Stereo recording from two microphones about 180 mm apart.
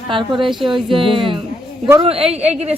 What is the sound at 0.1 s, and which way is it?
A woman's voice, 25° right (ahead or behind).